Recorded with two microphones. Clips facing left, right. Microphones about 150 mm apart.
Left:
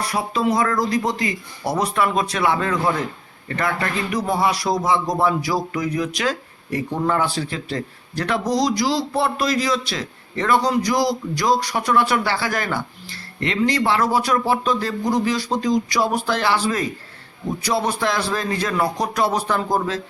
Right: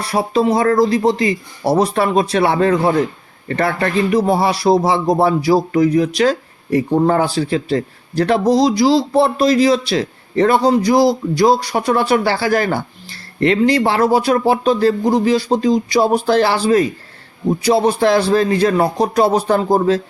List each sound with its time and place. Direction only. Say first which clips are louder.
0.0 s a man's voice: right 6 dB; 30° right (ahead or behind)